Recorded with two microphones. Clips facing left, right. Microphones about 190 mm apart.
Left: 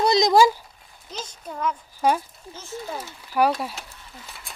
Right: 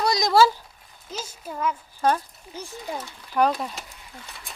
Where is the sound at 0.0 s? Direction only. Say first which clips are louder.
Left 2 dB; 20° left (ahead or behind).